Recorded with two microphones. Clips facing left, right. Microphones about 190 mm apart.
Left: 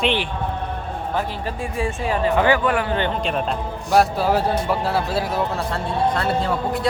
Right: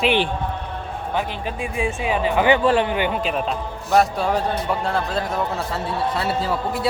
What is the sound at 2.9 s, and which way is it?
A man's voice, 10° right (ahead or behind).